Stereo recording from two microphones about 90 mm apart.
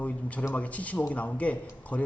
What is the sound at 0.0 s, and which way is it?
A man's voice, 15° left (ahead or behind).